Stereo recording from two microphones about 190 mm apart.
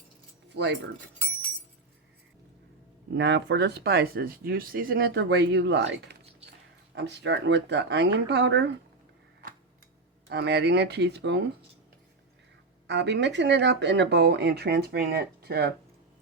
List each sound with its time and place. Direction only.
0.5 s speech: 65° right (ahead or behind)
3.1 s speech: 65° right (ahead or behind)
10.2 s speech: 60° right (ahead or behind)
12.9 s speech: 65° right (ahead or behind)